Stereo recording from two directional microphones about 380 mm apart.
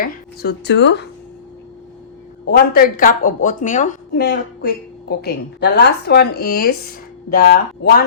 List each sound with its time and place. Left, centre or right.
0.0 s speech: left
2.5 s speech: left